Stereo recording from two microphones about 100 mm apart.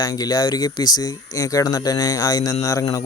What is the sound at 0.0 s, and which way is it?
Speech, 40° left (ahead or behind).